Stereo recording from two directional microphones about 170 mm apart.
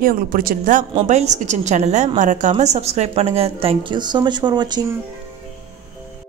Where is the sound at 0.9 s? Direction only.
45° right (ahead or behind); by 4.8 s 25° right (ahead or behind).